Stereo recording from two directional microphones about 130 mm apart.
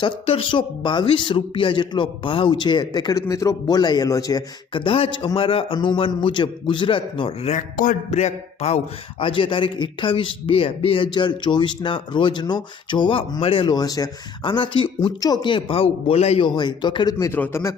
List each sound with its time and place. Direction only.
0.0 s a man's voice: 40° left (ahead or behind)
4.7 s a man's voice: 40° left (ahead or behind)
7.5 s a man's voice: 75° left (ahead or behind); by 16.5 s 50° left (ahead or behind)
16.6 s a man's voice: 35° left (ahead or behind)
17.3 s a man's voice: 15° left (ahead or behind)